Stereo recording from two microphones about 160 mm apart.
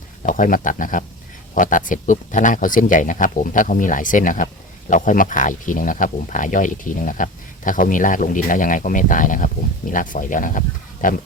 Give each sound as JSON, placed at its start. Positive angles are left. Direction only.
{"t": 0.2, "sound": "speech", "side_deg": 50}